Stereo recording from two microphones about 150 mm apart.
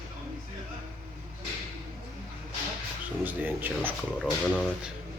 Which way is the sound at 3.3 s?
15° right (ahead or behind).